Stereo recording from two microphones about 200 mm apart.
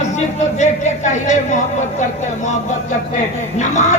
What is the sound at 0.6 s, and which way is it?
Speech, 35° left (ahead or behind).